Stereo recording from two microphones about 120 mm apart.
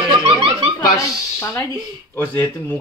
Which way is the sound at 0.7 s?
20° left (ahead or behind).